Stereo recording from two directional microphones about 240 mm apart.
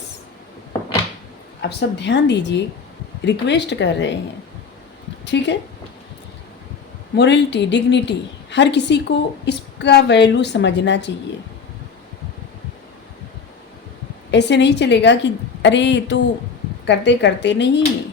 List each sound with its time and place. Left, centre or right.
1.8 s a woman's voice: left
5.2 s a woman's voice: left
7.2 s a woman's voice: left
14.3 s a woman's voice: left